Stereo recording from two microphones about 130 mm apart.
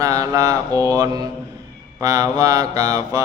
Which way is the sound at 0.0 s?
25° right (ahead or behind).